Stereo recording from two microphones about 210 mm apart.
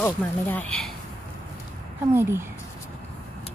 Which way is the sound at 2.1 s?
10° right (ahead or behind).